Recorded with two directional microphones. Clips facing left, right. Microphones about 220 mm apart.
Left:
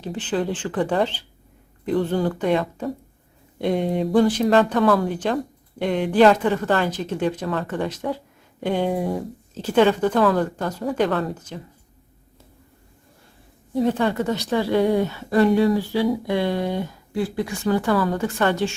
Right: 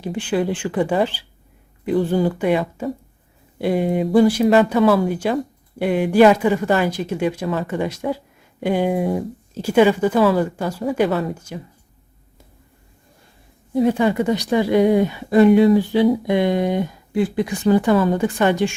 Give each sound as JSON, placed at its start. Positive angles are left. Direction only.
{"t": 0.0, "sound": "speech", "side_deg": -10}
{"t": 13.7, "sound": "speech", "side_deg": -10}